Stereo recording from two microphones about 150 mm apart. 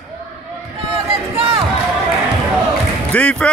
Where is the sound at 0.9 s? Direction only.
40° right (ahead or behind).